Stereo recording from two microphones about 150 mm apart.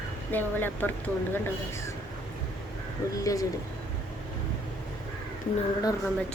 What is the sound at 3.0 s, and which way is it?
Speech, 20° left (ahead or behind).